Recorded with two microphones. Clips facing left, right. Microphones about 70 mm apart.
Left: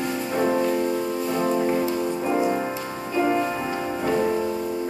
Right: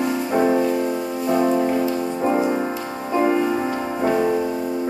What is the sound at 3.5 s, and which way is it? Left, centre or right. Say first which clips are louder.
Music: right 5 dB; right.